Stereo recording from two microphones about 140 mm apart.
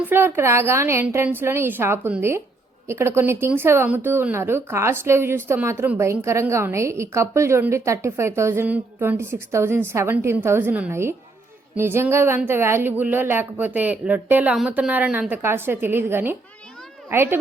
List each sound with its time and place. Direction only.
0.0 s a woman's voice: 15° right (ahead or behind)